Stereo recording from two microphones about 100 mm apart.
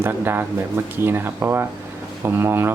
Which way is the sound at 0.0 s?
20° right (ahead or behind).